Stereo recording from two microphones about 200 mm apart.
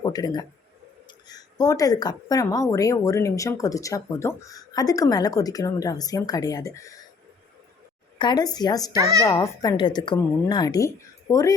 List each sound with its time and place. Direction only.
0.0 s a man's voice: 20° left (ahead or behind)
8.2 s speech: 20° left (ahead or behind)
9.0 s a child's voice: 15° right (ahead or behind)
9.2 s speech: 15° left (ahead or behind)